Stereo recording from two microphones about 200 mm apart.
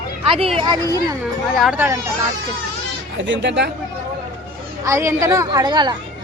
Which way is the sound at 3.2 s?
65° right (ahead or behind).